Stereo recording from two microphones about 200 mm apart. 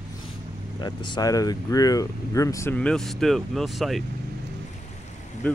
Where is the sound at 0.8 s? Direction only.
20° left (ahead or behind); by 4.0 s centre (ahead or behind).